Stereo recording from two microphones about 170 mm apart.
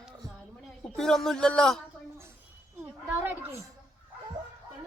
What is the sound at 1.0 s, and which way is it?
Speech, 5° left (ahead or behind).